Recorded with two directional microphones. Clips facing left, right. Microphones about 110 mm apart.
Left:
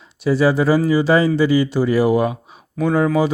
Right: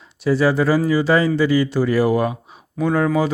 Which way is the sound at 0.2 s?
15° left (ahead or behind).